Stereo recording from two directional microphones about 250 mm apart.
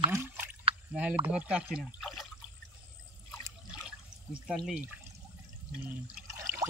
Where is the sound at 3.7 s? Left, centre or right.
Centre.